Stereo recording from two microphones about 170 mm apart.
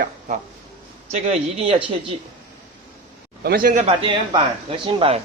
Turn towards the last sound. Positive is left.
turn(degrees=-35)  # may be behind; listen again after turning